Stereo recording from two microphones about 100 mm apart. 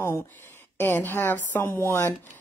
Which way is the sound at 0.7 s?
20° left (ahead or behind).